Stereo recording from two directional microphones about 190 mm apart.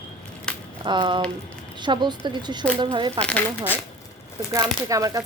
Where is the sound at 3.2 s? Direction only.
10° left (ahead or behind).